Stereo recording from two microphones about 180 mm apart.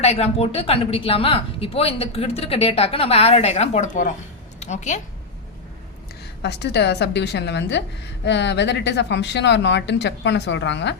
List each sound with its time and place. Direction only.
0.0 s speech: 35° left (ahead or behind)
6.4 s a woman's voice: 65° left (ahead or behind)